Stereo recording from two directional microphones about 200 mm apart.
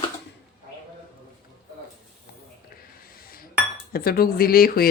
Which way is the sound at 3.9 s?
50° left (ahead or behind).